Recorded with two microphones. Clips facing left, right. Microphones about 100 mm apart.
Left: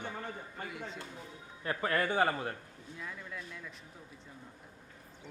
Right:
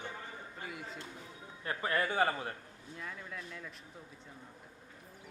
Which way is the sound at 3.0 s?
Centre (ahead or behind).